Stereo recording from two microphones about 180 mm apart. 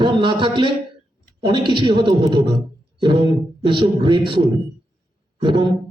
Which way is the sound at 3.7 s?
25° right (ahead or behind).